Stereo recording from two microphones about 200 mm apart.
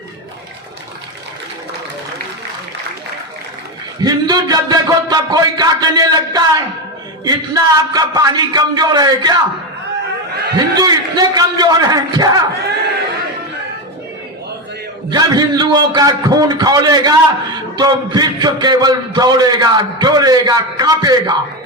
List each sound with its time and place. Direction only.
4.0 s a man's voice: 20° right (ahead or behind)
10.8 s a man's voice: 20° right (ahead or behind)
15.1 s a man's voice: 20° right (ahead or behind)